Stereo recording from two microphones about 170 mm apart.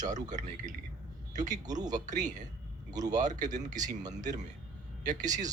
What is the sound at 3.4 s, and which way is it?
Speech, 45° right (ahead or behind).